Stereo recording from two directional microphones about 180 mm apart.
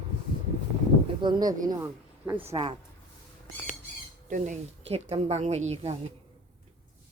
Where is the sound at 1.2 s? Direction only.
25° right (ahead or behind).